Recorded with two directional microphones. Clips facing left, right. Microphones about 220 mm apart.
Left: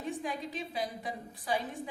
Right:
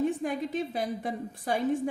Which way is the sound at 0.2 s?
55° right (ahead or behind).